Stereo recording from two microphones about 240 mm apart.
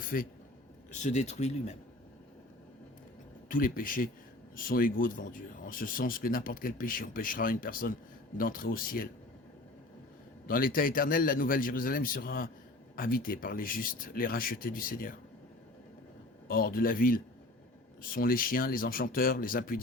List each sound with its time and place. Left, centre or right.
0.1 s speech: left
3.5 s speech: left
10.4 s speech: left
16.5 s speech: left